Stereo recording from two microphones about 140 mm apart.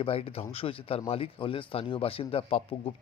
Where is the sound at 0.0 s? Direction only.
45° left (ahead or behind).